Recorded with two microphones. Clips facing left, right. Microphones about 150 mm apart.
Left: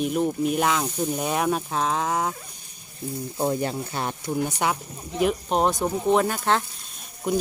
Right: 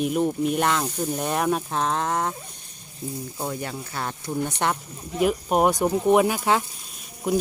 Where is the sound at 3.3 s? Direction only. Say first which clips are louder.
Left 9 dB; 25° left (ahead or behind).